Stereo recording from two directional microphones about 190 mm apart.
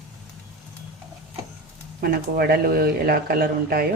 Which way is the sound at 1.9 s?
55° right (ahead or behind).